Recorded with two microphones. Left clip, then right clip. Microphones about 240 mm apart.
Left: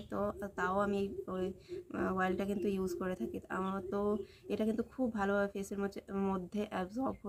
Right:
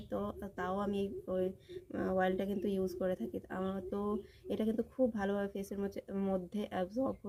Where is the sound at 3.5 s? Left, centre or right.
Right.